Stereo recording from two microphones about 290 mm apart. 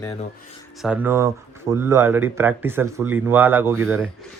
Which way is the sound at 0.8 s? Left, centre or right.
Centre.